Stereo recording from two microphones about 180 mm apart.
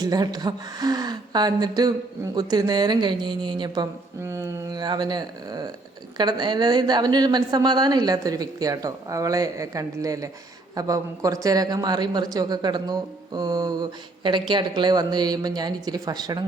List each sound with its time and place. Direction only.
0.0 s speech: 20° right (ahead or behind)